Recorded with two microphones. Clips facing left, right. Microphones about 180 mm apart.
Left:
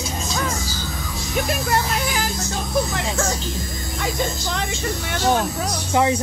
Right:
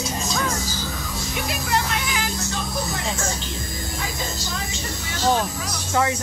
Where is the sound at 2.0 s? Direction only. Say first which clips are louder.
Left 3 dB; 40° left (ahead or behind).